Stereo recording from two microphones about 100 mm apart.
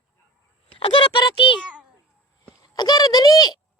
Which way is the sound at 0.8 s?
55° left (ahead or behind).